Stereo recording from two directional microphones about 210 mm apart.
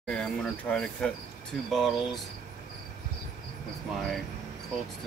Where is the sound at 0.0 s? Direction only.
5° left (ahead or behind).